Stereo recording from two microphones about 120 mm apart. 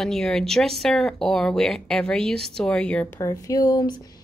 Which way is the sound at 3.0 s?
30° left (ahead or behind).